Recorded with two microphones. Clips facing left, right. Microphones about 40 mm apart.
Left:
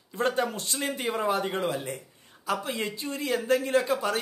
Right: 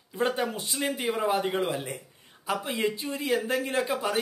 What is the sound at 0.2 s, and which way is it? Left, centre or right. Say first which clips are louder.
Speech: left 1 dB; centre.